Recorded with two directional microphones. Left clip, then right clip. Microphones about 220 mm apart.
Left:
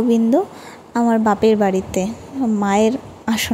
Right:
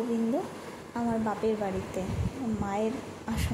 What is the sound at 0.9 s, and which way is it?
A woman's voice, 45° left (ahead or behind).